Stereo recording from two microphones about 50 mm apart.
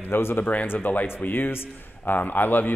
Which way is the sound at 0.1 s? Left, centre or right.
Left.